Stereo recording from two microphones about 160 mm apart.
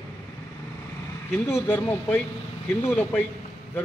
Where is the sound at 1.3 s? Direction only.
15° left (ahead or behind).